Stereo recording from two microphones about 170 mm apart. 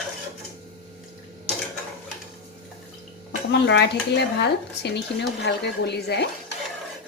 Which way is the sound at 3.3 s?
90° left.